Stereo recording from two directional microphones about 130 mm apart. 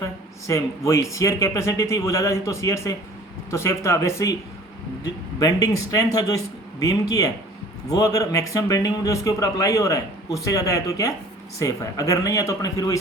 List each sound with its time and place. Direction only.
0.0 s a man's voice: 25° left (ahead or behind)
5.4 s a man's voice: 25° left (ahead or behind)